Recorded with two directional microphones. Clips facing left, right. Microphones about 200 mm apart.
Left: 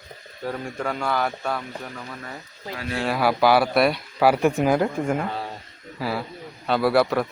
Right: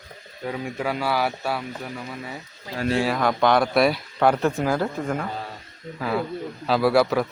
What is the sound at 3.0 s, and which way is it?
Speech, 5° left (ahead or behind).